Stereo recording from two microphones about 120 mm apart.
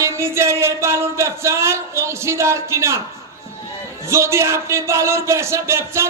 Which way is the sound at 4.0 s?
25° right (ahead or behind).